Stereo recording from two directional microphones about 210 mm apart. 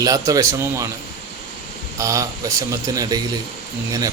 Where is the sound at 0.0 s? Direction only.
15° right (ahead or behind).